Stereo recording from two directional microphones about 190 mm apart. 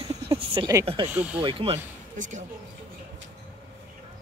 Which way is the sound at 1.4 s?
30° right (ahead or behind).